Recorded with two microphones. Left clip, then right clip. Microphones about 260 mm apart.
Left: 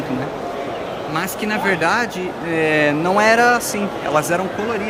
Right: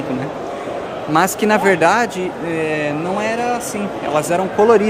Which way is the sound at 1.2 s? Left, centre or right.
Centre.